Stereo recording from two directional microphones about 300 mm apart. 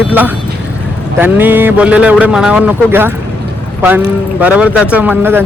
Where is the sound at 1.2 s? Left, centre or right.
Centre.